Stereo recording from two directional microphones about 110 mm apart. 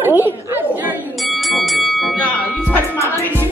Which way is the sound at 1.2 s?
Centre (ahead or behind).